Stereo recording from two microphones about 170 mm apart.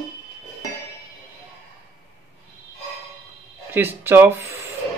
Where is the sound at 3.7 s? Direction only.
10° right (ahead or behind).